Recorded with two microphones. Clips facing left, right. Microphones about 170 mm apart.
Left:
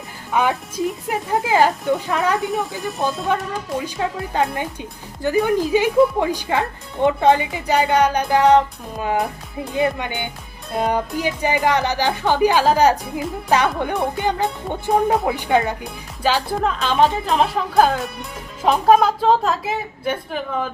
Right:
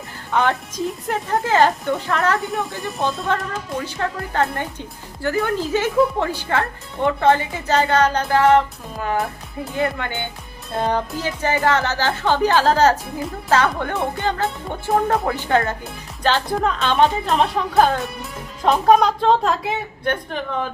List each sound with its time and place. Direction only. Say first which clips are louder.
0.3 s speech: even; 10° left (ahead or behind)
2.6 s speech: left 1 dB; centre (ahead or behind)
3.2 s speech: left 1 dB; 10° left (ahead or behind)